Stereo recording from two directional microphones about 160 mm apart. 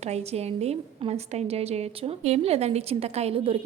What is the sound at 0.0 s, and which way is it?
A woman's voice, 40° right (ahead or behind).